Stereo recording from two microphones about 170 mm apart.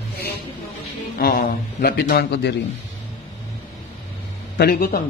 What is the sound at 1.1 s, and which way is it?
A man's voice, 60° left (ahead or behind).